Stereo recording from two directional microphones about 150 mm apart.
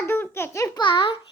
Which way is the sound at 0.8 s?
35° left (ahead or behind).